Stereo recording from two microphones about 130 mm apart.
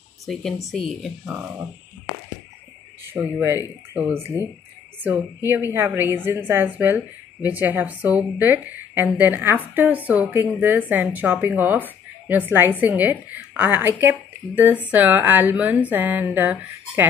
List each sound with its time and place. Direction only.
0.3 s speech: 5° left (ahead or behind)
3.1 s a woman's voice: 15° right (ahead or behind)
5.7 s a woman's voice: 15° right (ahead or behind)